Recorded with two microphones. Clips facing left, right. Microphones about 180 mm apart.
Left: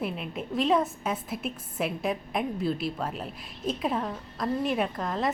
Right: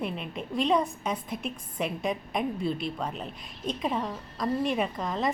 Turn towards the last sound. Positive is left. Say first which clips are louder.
# even
turn(degrees=0)  # may be behind; listen again after turning